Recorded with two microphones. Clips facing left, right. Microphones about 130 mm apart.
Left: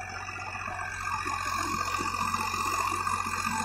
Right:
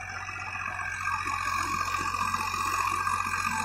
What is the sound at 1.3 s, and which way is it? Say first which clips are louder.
Vehicle: even; 10° left (ahead or behind).